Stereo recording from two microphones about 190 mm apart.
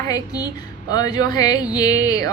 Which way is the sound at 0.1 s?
20° left (ahead or behind).